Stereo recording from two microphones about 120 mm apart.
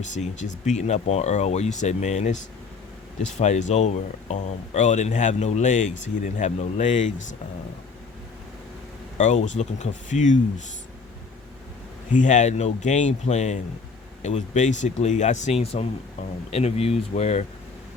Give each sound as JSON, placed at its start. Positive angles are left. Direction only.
{"t": 0.0, "sound": "speech", "side_deg": 90}
{"t": 9.1, "sound": "speech", "side_deg": 85}
{"t": 12.1, "sound": "speech", "side_deg": 90}